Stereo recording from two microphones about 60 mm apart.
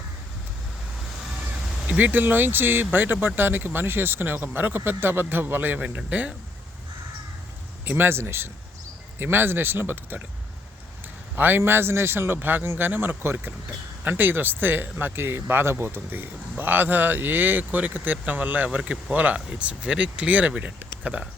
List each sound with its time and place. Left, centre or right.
2.0 s speech: right
7.9 s speech: right
11.3 s speech: right
18.8 s speech: centre
19.1 s speech: right